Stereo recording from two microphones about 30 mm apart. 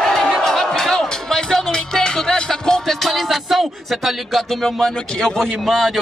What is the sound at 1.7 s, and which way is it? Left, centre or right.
Music, left.